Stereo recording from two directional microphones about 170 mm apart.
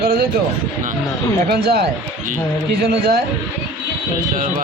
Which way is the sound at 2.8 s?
65° right (ahead or behind).